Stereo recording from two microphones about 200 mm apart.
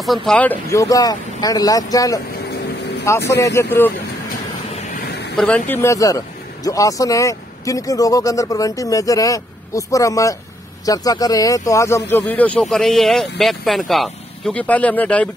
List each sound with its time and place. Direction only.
0.0 s speech: centre (ahead or behind)
5.3 s speech: 5° left (ahead or behind)